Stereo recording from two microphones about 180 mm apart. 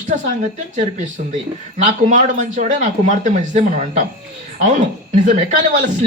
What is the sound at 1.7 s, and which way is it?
Speech, 40° right (ahead or behind).